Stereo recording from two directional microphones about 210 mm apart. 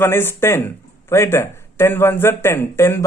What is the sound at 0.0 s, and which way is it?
Speech, 10° left (ahead or behind).